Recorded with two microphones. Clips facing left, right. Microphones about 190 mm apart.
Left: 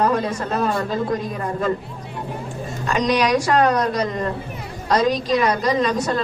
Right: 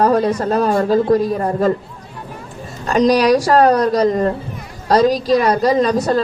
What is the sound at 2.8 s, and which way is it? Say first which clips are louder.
A woman's voice: right 7 dB; 35° right (ahead or behind).